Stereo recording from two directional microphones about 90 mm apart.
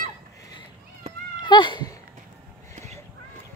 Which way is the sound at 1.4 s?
60° left (ahead or behind).